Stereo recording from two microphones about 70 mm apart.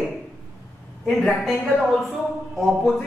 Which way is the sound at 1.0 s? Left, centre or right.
Centre.